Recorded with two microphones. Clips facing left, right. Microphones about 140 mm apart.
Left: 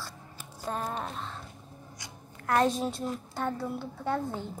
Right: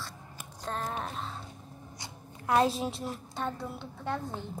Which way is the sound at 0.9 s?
Centre (ahead or behind).